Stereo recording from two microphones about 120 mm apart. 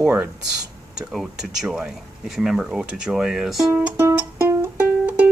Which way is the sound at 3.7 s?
15° right (ahead or behind).